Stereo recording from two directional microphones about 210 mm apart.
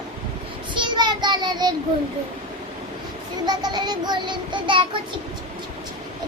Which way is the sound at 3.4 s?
20° right (ahead or behind).